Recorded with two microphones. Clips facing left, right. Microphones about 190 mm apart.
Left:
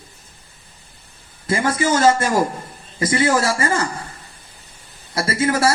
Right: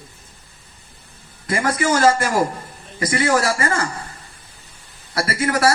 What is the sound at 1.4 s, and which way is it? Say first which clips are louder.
A man's voice: left 1 dB; 25° left (ahead or behind).